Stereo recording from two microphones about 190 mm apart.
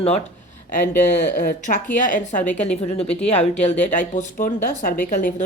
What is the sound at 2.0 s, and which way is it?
A woman's voice, 45° left (ahead or behind).